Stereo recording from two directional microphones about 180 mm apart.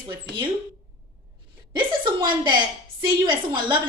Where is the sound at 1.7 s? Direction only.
25° right (ahead or behind).